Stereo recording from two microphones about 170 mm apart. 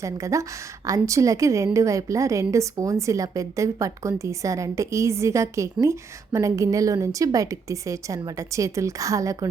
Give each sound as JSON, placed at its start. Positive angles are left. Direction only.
{"t": 0.0, "sound": "a woman's voice", "side_deg": -20}